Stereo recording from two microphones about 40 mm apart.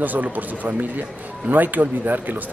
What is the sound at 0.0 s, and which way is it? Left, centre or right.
Speech, right.